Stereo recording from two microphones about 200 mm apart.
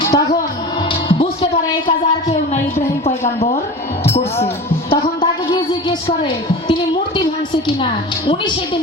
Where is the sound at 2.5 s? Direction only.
35° left (ahead or behind).